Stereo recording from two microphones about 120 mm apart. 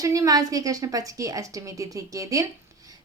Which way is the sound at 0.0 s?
30° right (ahead or behind).